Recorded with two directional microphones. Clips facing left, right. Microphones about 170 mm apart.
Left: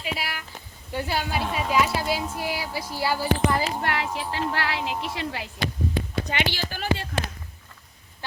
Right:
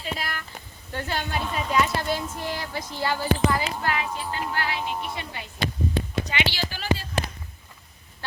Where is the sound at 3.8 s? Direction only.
70° left (ahead or behind); by 5.5 s 90° left.